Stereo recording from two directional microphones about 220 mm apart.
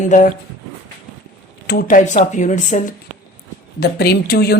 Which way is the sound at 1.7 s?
40° left (ahead or behind).